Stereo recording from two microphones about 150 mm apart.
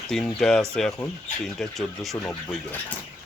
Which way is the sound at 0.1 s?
5° left (ahead or behind).